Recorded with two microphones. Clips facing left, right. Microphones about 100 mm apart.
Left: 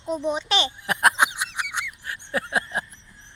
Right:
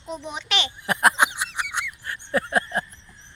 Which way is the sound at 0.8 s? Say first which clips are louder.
Right 3 dB; centre (ahead or behind).